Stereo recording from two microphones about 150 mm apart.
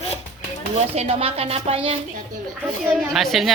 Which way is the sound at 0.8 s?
45° right (ahead or behind).